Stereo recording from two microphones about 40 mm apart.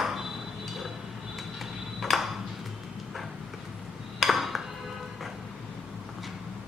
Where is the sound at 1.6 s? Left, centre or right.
Centre.